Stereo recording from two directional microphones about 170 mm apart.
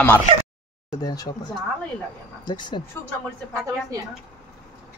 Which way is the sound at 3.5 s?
20° right (ahead or behind).